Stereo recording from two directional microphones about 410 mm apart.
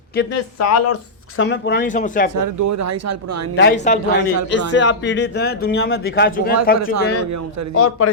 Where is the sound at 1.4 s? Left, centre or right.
Left.